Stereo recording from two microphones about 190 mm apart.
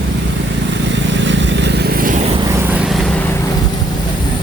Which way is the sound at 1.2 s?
70° right (ahead or behind).